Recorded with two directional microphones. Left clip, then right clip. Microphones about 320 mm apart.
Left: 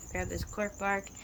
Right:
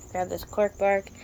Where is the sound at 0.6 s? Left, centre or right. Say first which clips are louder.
Right 10 dB; centre.